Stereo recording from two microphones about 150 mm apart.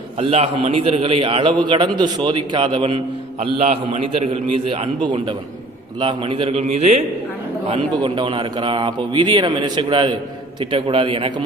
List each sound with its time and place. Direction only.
0.2 s a man's voice: 40° right (ahead or behind)
7.7 s a man's voice: 35° right (ahead or behind)